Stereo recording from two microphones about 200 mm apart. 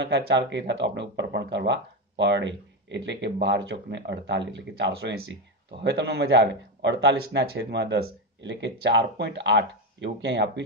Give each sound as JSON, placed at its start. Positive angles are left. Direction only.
{"t": 0.0, "sound": "speech", "side_deg": -60}